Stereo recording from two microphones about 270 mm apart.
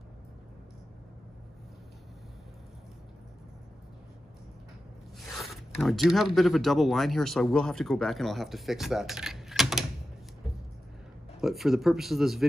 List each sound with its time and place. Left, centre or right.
5.4 s speech: centre
11.4 s speech: centre